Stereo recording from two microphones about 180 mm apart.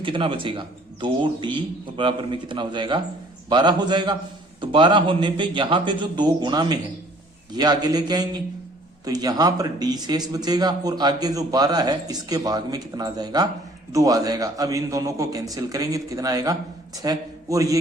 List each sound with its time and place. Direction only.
0.0 s a man's voice: 30° right (ahead or behind)